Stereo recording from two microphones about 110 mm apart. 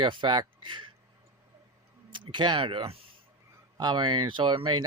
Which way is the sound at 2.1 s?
45° right (ahead or behind).